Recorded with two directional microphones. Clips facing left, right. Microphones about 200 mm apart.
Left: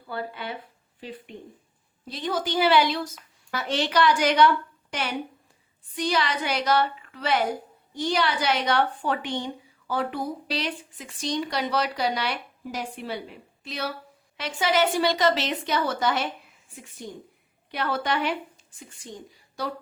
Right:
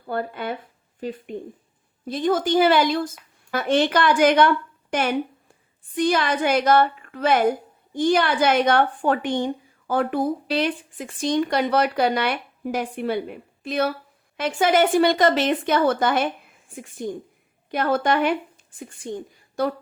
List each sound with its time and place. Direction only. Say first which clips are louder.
0.0 s a woman's voice: right 6 dB; 50° right (ahead or behind)